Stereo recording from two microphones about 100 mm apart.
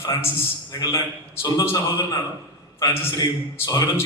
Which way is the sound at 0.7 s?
40° left (ahead or behind).